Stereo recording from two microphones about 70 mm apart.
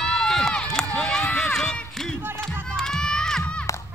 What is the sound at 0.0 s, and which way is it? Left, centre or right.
Run, centre.